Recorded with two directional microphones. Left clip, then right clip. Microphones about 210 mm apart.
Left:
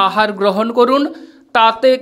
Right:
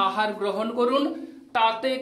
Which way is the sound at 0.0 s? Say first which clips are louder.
Left 11 dB; 40° left (ahead or behind).